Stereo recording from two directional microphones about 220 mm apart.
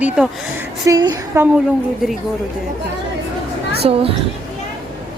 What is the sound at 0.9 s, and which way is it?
Speech, 15° right (ahead or behind).